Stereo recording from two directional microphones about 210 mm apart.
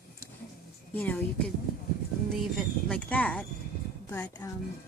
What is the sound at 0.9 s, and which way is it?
Speech, 5° left (ahead or behind).